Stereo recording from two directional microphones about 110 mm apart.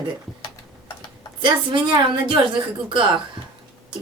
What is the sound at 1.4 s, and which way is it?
Speech, 45° right (ahead or behind).